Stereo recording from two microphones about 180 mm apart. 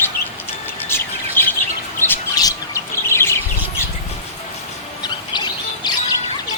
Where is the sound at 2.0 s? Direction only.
20° left (ahead or behind).